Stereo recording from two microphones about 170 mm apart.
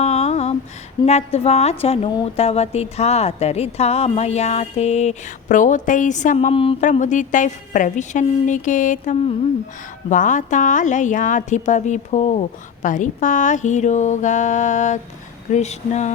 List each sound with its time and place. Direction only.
0.0 s a sound: 40° left (ahead or behind)
1.0 s a woman's voice: 40° left (ahead or behind)
6.9 s a woman's voice: 45° left (ahead or behind)